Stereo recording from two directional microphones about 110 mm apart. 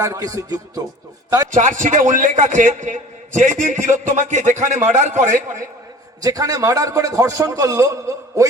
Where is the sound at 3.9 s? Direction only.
90° right.